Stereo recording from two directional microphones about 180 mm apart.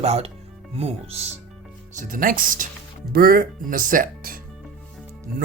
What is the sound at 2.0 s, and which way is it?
Speech, 50° right (ahead or behind).